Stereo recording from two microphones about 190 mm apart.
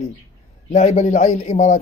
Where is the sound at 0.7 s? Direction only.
40° left (ahead or behind).